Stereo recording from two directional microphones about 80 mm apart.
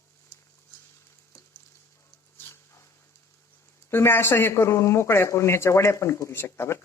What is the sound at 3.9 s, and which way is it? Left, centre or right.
Speech, left.